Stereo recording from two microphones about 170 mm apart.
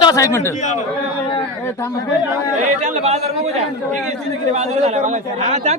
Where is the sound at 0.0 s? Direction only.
20° left (ahead or behind).